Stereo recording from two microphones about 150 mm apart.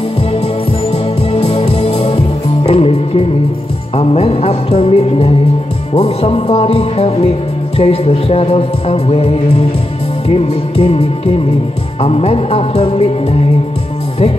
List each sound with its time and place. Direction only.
1.3 s music: 45° left (ahead or behind)
3.9 s speech: 45° left (ahead or behind)
10.2 s music: 40° left (ahead or behind)
12.0 s music: 40° left (ahead or behind)